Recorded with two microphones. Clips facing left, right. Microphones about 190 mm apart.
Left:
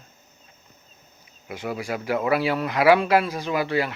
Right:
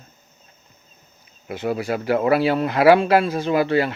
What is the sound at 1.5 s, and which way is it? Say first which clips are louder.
Speech: right 5 dB; 30° right (ahead or behind).